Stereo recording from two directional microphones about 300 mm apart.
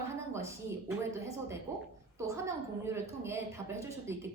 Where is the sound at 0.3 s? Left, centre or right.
Centre.